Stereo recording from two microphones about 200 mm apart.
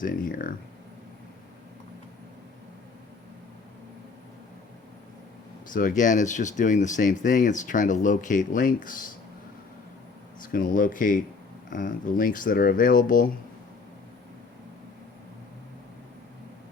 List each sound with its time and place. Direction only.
0.0 s speech: 45° left (ahead or behind)
5.7 s speech: 40° left (ahead or behind)
10.4 s speech: 40° left (ahead or behind)